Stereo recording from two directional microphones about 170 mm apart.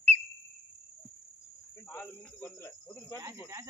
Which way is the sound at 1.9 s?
15° left (ahead or behind).